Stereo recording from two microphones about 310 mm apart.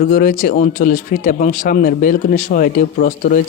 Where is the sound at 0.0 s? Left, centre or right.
Left.